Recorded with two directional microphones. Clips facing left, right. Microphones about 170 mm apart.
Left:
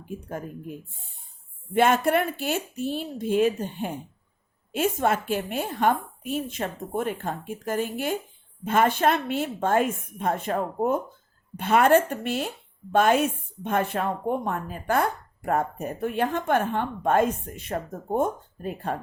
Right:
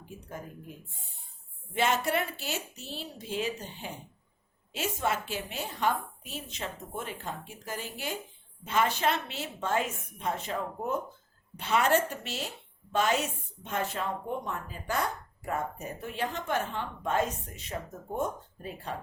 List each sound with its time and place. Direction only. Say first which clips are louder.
0.0 s speech: left 8 dB; 55° left (ahead or behind)
1.7 s a woman's voice: left 8 dB; 55° left (ahead or behind)